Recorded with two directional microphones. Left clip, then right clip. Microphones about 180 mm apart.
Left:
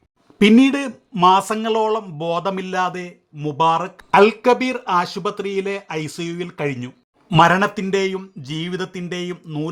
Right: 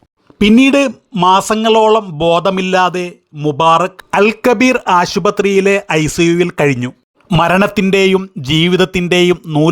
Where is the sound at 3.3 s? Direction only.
40° right (ahead or behind).